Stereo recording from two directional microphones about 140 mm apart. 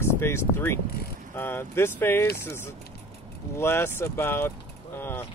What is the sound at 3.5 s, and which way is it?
Speech, 15° left (ahead or behind).